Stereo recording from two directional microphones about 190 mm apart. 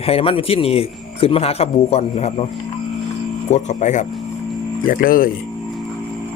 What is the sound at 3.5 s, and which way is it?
A man's voice, 40° left (ahead or behind).